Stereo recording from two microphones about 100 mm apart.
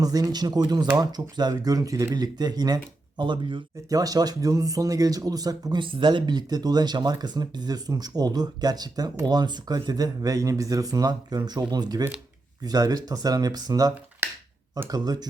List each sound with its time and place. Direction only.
0.0 s speech: 40° right (ahead or behind)
3.8 s speech: 40° right (ahead or behind)
5.8 s speech: 55° right (ahead or behind)
14.2 s speech: 25° right (ahead or behind)
14.8 s speech: 40° right (ahead or behind)